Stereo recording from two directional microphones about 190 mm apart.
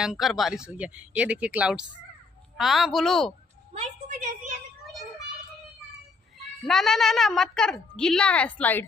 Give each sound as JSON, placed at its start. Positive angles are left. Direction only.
{"t": 0.0, "sound": "a woman's voice", "side_deg": 0}
{"t": 3.7, "sound": "a woman's voice", "side_deg": -35}
{"t": 6.3, "sound": "a woman's voice", "side_deg": 0}